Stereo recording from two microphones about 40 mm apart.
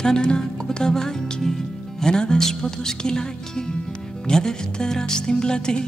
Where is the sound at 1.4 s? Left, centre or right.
Centre.